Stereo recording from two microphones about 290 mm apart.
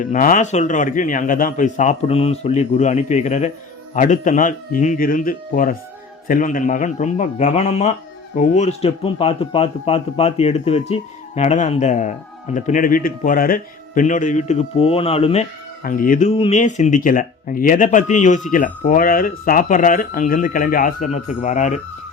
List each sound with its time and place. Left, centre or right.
0.0 s speech: left